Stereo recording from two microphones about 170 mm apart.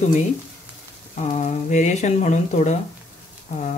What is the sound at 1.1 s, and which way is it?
Speech, 40° left (ahead or behind).